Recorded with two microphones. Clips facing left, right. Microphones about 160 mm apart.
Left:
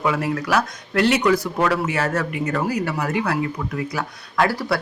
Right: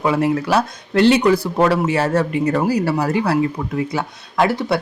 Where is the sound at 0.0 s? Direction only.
25° right (ahead or behind).